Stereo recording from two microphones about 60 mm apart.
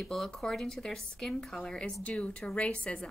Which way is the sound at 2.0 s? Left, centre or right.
Left.